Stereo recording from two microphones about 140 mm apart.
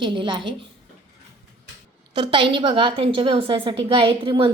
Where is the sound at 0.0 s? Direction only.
35° right (ahead or behind).